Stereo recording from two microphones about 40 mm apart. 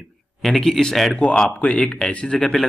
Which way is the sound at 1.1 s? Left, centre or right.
Left.